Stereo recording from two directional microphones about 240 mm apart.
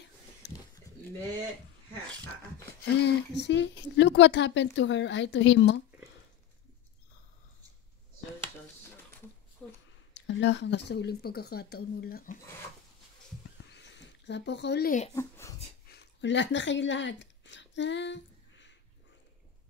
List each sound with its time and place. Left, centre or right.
0.4 s a sound: left
2.8 s speech: left
9.6 s speech: centre
10.1 s speech: left
13.7 s speech: left
15.1 s speech: centre
15.9 s a sound: left